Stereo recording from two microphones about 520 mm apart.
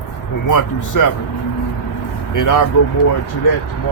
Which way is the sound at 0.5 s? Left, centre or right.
Left.